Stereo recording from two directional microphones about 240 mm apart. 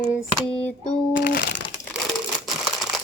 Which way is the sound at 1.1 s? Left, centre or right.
Left.